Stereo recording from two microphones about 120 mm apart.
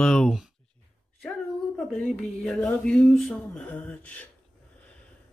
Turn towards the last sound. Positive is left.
turn(degrees=10)  # may be behind; listen again after turning